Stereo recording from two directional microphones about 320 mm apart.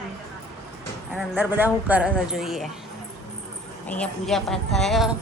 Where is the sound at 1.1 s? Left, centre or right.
Centre.